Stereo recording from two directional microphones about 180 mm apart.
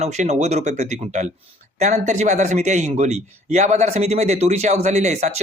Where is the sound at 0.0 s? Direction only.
40° right (ahead or behind).